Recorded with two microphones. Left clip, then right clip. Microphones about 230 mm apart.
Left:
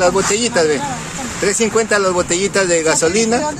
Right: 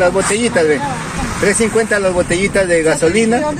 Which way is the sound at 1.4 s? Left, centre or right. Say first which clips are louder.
Right 2 dB; centre.